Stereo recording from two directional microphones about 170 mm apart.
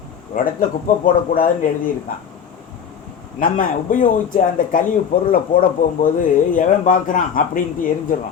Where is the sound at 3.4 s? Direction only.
55° left (ahead or behind).